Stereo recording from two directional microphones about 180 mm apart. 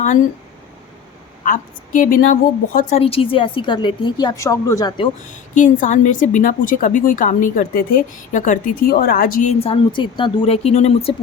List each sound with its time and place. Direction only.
1.5 s a woman's voice: 45° left (ahead or behind)
3.0 s a woman's voice: 30° left (ahead or behind)
5.5 s a woman's voice: 45° left (ahead or behind)
8.9 s a woman's voice: 55° left (ahead or behind)
9.6 s speech: 30° left (ahead or behind)